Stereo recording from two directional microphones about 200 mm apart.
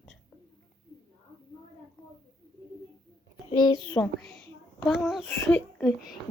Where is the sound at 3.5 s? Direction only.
20° left (ahead or behind).